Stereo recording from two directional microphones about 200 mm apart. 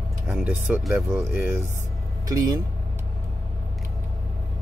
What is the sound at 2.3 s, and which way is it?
Speech, 15° right (ahead or behind).